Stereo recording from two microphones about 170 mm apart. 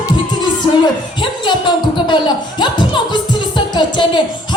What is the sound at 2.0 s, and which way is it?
Music, 25° left (ahead or behind).